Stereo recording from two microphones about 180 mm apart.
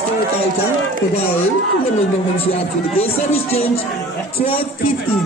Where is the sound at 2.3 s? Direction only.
30° left (ahead or behind).